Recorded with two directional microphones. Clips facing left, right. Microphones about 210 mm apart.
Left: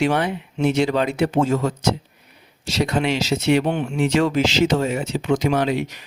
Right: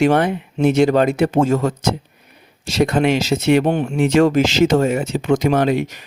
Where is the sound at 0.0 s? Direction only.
50° right (ahead or behind).